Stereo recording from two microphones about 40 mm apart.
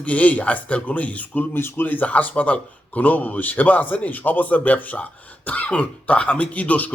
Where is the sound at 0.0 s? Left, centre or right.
Left.